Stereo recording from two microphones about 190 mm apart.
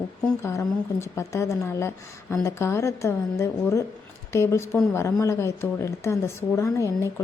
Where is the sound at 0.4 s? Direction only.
15° left (ahead or behind).